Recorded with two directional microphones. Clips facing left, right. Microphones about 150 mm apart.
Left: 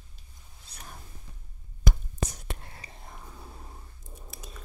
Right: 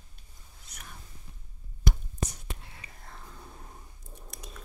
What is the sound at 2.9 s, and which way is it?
Whispering, 20° left (ahead or behind).